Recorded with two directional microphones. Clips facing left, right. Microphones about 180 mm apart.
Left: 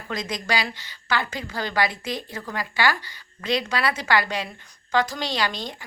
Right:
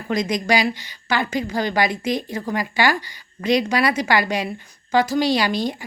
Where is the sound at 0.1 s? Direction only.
15° right (ahead or behind).